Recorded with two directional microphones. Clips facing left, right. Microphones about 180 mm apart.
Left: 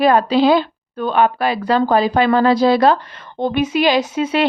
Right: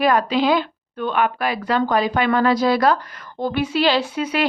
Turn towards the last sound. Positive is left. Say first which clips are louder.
# left 4 dB
turn(degrees=25)  # may be behind; listen again after turning